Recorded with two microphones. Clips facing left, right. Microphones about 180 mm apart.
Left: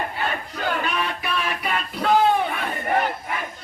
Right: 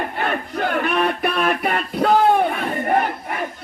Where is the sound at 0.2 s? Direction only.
55° right (ahead or behind).